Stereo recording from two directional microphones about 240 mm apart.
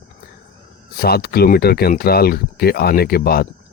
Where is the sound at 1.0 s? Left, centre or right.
Left.